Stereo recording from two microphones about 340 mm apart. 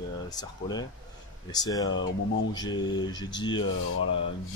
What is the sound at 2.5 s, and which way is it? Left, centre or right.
Speech, centre.